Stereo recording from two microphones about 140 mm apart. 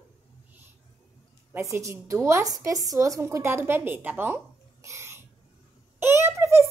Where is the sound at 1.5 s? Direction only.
20° right (ahead or behind).